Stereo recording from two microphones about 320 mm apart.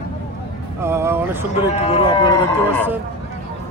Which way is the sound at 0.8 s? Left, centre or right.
Centre.